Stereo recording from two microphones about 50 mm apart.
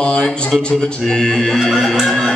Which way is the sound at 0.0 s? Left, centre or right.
Left.